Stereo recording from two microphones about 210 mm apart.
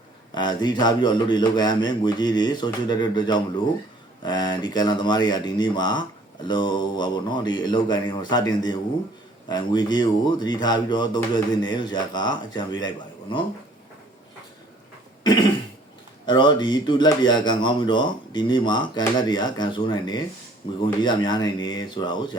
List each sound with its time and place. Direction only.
0.3 s speech: 20° left (ahead or behind)
16.2 s speech: 20° left (ahead or behind)